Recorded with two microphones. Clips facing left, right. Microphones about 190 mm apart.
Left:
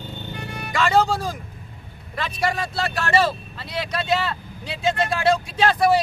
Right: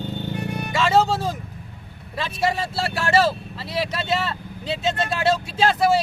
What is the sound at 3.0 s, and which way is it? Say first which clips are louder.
Speech: right 2 dB; 25° right (ahead or behind).